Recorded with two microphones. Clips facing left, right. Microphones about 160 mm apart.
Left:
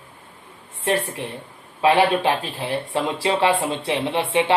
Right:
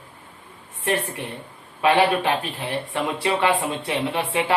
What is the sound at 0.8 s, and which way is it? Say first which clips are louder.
Speech: left 2 dB; 25° left (ahead or behind).